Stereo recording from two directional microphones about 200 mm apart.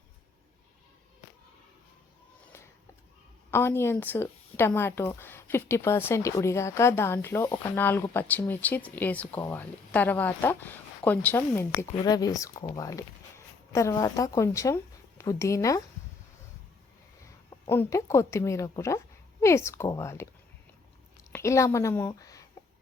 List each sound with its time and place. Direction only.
3.5 s speech: 10° left (ahead or behind)
17.5 s speech: 15° left (ahead or behind)
21.3 s a woman's voice: 15° left (ahead or behind)